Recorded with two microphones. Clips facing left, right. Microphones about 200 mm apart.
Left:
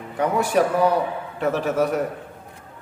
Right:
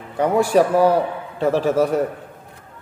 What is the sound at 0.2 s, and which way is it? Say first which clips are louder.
A man's voice: right 4 dB; 30° right (ahead or behind).